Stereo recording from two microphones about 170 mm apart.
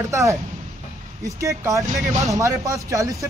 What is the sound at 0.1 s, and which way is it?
Speech, 20° right (ahead or behind).